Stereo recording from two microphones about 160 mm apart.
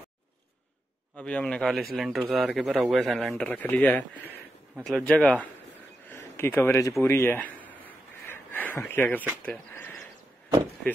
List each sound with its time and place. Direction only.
1.1 s speech: 5° left (ahead or behind)
5.0 s a man's voice: 5° left (ahead or behind)
9.4 s a sound: 10° left (ahead or behind)